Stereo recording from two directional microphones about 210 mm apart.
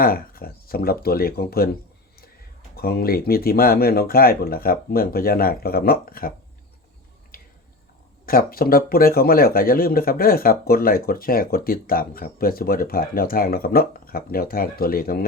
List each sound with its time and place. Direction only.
0.0 s speech: 45° left (ahead or behind)
2.7 s speech: 45° left (ahead or behind)
8.3 s speech: 45° left (ahead or behind)